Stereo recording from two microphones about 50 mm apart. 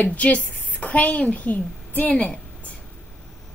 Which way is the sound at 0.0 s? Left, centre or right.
Left.